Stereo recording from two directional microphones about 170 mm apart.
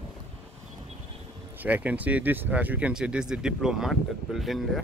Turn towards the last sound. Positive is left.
turn(degrees=0)  # may be behind; listen again after turning